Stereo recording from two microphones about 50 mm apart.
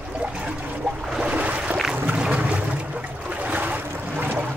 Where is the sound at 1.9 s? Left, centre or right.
Right.